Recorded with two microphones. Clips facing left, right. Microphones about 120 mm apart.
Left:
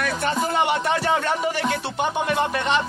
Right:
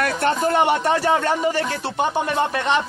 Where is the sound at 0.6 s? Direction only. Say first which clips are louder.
Right 3 dB; 30° right (ahead or behind).